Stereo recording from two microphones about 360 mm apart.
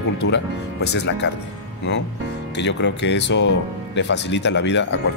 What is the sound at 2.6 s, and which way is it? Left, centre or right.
Speech, left.